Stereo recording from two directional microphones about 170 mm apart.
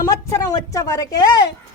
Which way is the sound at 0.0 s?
20° left (ahead or behind).